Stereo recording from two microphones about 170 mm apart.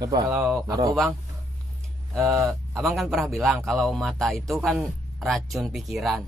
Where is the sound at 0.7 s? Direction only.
20° right (ahead or behind).